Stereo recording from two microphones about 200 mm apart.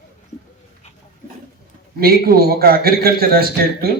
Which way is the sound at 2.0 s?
50° right (ahead or behind).